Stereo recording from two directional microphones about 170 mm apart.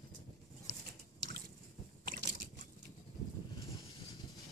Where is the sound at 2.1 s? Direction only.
90° right.